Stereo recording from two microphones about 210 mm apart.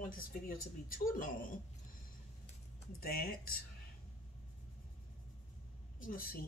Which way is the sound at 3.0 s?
45° left (ahead or behind).